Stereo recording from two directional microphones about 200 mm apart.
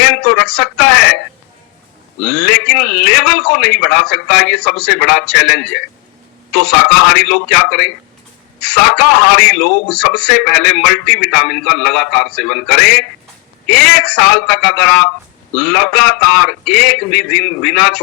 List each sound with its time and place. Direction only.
0.0 s a sound: 5° left (ahead or behind)
2.2 s a man's voice: 5° left (ahead or behind)
9.6 s a man's voice: 50° left (ahead or behind)
9.9 s a man's voice: 5° left (ahead or behind)